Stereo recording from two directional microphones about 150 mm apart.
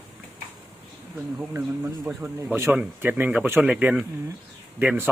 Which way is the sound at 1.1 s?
15° right (ahead or behind).